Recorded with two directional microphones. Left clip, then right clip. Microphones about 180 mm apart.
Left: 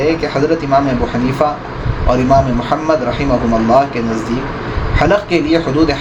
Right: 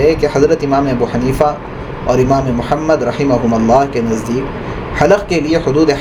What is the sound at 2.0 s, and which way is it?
Speech, 50° right (ahead or behind).